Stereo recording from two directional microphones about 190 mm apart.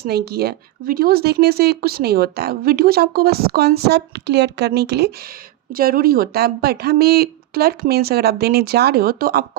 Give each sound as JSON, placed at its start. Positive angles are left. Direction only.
{"t": 0.0, "sound": "speech", "side_deg": -55}
{"t": 5.7, "sound": "speech", "side_deg": -50}